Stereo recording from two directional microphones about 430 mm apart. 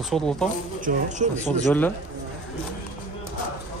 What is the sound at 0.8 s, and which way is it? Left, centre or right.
Speech, centre.